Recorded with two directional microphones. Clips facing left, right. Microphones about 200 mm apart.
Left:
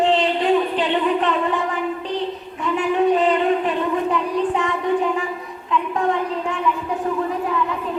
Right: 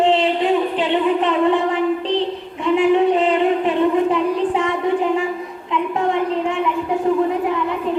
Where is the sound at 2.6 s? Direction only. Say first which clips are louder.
Right 4 dB; 25° right (ahead or behind).